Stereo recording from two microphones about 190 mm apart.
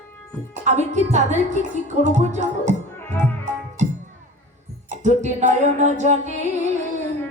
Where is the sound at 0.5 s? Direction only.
40° right (ahead or behind).